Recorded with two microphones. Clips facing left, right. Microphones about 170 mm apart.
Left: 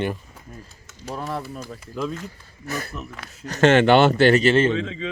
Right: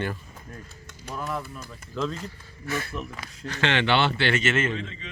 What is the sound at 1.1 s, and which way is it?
Speech, 35° left (ahead or behind).